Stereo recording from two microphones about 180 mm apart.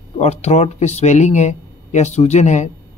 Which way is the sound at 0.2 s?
35° left (ahead or behind).